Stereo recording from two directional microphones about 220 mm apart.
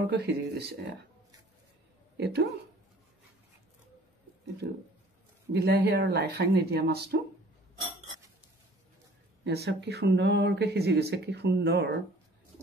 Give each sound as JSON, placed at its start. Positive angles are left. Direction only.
{"t": 0.0, "sound": "speech", "side_deg": -45}
{"t": 2.1, "sound": "speech", "side_deg": -50}
{"t": 5.5, "sound": "speech", "side_deg": -45}
{"t": 9.4, "sound": "speech", "side_deg": -50}